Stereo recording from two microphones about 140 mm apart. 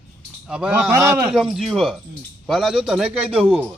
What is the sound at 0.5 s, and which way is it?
Speech, 5° right (ahead or behind).